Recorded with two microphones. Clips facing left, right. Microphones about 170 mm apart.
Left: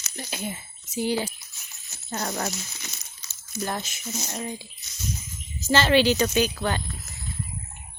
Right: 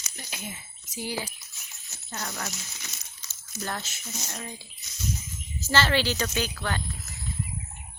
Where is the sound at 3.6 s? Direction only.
15° left (ahead or behind).